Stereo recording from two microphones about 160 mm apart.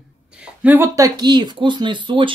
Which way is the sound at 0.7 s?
15° right (ahead or behind).